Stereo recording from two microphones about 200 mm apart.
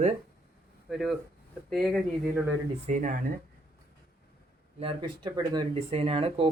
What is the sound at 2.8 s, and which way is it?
Speech, 40° right (ahead or behind).